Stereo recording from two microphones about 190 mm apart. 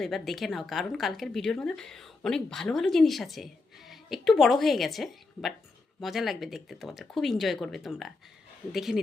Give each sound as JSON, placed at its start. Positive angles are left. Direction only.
{"t": 0.0, "sound": "speech", "side_deg": 0}